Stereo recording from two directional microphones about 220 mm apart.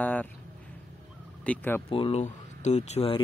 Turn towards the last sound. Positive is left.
turn(degrees=30)  # may be behind; listen again after turning